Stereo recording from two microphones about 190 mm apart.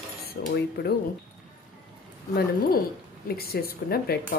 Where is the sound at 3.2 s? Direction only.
55° left (ahead or behind).